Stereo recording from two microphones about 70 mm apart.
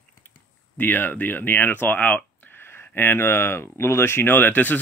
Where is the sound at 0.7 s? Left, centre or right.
Left.